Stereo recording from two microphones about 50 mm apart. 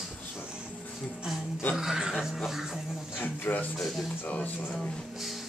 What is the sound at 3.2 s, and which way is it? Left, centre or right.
Speech, left.